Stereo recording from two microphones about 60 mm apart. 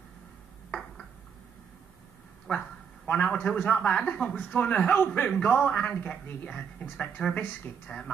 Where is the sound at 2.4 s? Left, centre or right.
Left.